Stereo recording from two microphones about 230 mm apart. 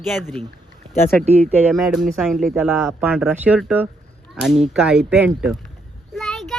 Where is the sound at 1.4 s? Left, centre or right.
Centre.